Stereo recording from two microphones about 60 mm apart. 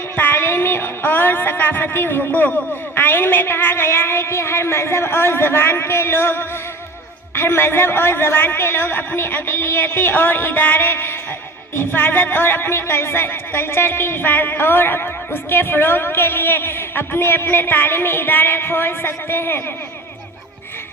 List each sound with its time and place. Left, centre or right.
0.2 s speech: left